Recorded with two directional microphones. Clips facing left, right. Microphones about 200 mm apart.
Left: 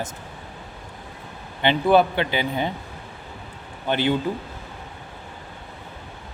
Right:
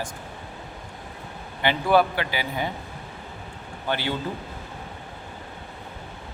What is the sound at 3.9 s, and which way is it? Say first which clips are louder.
Speech: left 5 dB; 20° left (ahead or behind).